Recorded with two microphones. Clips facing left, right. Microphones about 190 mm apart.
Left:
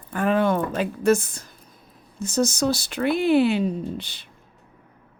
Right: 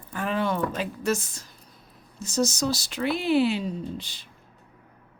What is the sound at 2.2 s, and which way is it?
Speech, 55° left (ahead or behind).